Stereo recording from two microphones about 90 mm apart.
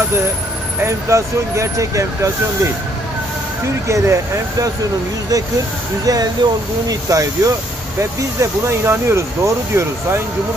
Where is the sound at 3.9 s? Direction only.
35° right (ahead or behind).